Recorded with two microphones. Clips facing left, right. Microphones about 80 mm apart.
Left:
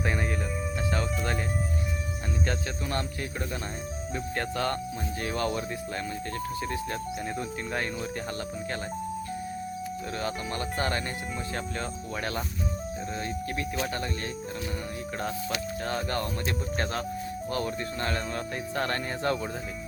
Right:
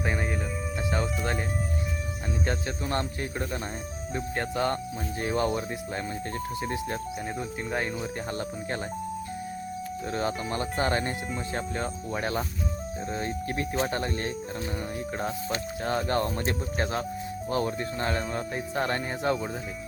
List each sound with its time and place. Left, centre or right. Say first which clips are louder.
0.0 s music: even; centre
0.9 s speech: right 2 dB; centre
4.1 s speech: right 2 dB; centre
10.2 s speech: right 4 dB; right
13.2 s speech: right 2 dB; right
15.2 s speech: left 1 dB; right
16.7 s speech: right 1 dB; centre
17.5 s speech: right 4 dB; right